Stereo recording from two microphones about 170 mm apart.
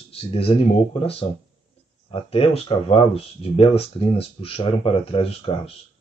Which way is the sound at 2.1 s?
35° left (ahead or behind).